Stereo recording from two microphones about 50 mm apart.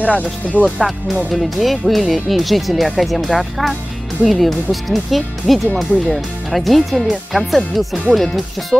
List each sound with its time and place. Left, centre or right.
0.0 s speech: left
1.3 s speech: centre